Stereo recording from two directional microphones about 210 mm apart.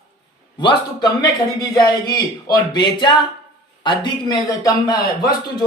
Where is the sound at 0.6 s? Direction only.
20° left (ahead or behind).